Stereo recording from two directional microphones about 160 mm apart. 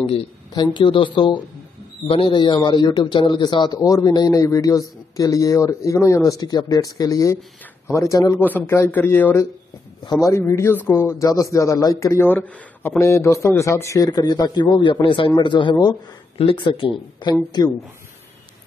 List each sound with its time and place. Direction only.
0.0 s speech: 35° left (ahead or behind)